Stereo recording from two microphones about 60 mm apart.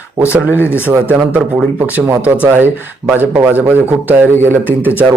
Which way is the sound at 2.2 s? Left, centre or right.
Right.